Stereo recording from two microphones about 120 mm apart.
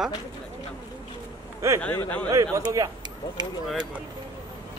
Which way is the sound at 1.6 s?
25° right (ahead or behind).